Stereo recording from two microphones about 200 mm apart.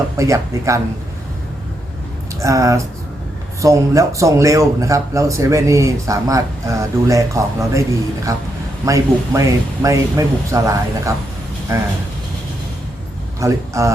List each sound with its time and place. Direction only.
0.2 s speech: 15° right (ahead or behind)
2.4 s a man's voice: 15° right (ahead or behind)
13.4 s speech: 15° right (ahead or behind)